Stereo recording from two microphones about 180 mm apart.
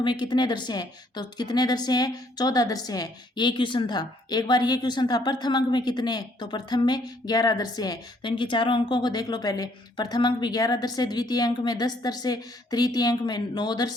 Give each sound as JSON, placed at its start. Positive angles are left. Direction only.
{"t": 0.0, "sound": "a woman's voice", "side_deg": 25}